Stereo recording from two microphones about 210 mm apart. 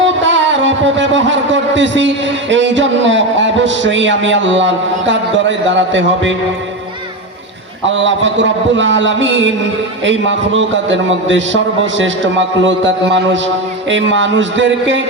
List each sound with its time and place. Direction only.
0.0 s a man's voice: 60° right (ahead or behind)
7.9 s a man's voice: 60° right (ahead or behind)